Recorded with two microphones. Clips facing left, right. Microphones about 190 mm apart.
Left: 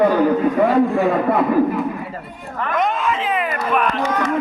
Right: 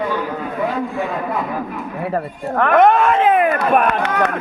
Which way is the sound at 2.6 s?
60° right (ahead or behind).